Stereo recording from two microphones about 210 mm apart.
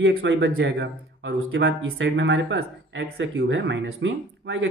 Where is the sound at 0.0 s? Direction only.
55° right (ahead or behind).